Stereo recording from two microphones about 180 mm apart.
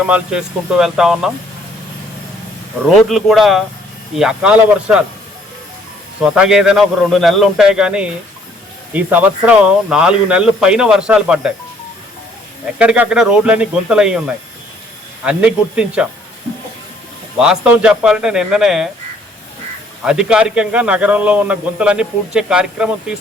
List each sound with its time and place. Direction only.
0.0 s speech: 5° right (ahead or behind)
3.1 s speech: centre (ahead or behind)
6.2 s speech: 5° right (ahead or behind)
12.8 s speech: 5° right (ahead or behind)
15.2 s speech: 5° right (ahead or behind)
17.4 s speech: 5° right (ahead or behind)
20.0 s a man's voice: 5° right (ahead or behind)